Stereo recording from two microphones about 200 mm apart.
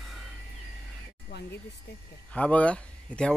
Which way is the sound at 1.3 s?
60° left (ahead or behind).